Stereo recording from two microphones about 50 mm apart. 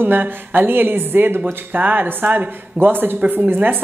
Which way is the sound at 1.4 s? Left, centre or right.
Right.